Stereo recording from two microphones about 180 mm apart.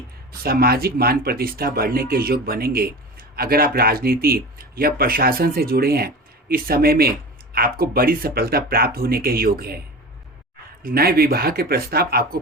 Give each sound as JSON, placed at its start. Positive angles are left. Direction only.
{"t": 0.4, "sound": "speech", "side_deg": -60}
{"t": 10.8, "sound": "speech", "side_deg": -60}